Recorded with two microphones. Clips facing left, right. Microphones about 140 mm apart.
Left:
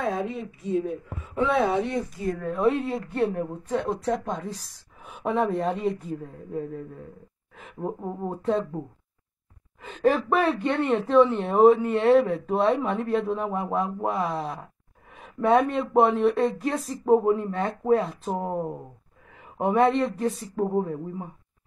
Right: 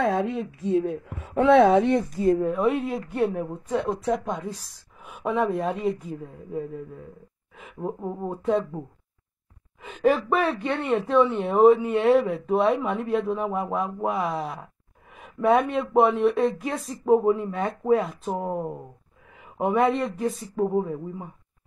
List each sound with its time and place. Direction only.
0.0 s speech: 85° right
2.2 s a woman's voice: 25° right (ahead or behind)
2.5 s speech: centre (ahead or behind)
3.1 s a woman's voice: 10° right (ahead or behind)
9.8 s speech: 5° right (ahead or behind)